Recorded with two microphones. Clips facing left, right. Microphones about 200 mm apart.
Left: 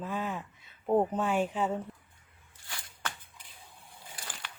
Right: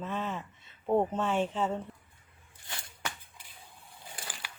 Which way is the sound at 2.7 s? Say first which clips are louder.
Right 1 dB; 25° right (ahead or behind).